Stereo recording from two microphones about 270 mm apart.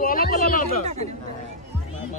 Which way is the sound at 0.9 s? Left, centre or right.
Right.